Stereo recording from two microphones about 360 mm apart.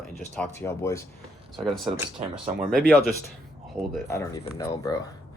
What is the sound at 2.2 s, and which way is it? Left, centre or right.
Speech, centre.